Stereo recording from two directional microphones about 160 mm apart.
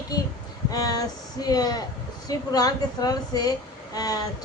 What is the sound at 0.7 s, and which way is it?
A woman's voice, 25° left (ahead or behind).